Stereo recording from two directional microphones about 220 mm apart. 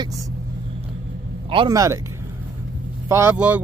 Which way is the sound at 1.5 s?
20° right (ahead or behind).